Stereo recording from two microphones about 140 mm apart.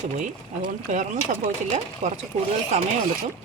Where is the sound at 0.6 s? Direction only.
65° right (ahead or behind).